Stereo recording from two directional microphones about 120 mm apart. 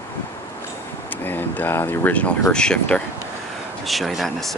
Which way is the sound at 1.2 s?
15° left (ahead or behind).